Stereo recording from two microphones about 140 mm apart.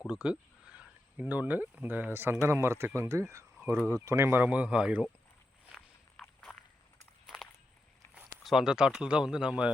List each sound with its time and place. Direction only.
0.1 s speech: 5° right (ahead or behind)
3.8 s speech: 15° left (ahead or behind)
4.0 s speech: 15° right (ahead or behind)
5.7 s walk: centre (ahead or behind)
8.1 s speech: 5° right (ahead or behind)